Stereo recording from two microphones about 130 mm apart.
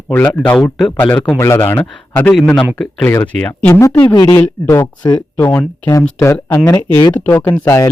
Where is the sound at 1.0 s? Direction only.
15° left (ahead or behind).